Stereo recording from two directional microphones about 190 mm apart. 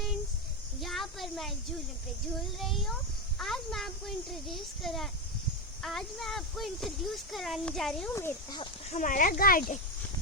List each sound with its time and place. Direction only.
0.8 s a sound: centre (ahead or behind)
2.6 s a child's voice: centre (ahead or behind)
8.1 s speech: 15° left (ahead or behind)
8.9 s speech: 40° left (ahead or behind)